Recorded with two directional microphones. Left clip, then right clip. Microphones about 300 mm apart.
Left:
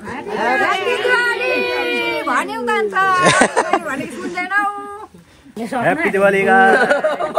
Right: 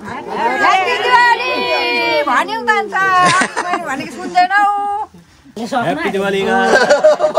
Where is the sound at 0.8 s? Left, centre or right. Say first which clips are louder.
Right 5 dB; right.